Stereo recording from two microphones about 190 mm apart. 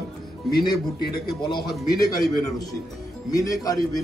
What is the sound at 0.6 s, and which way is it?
Speech, 55° left (ahead or behind).